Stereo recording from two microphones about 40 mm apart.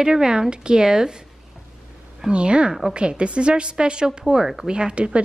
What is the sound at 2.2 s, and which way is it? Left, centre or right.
A woman's voice, right.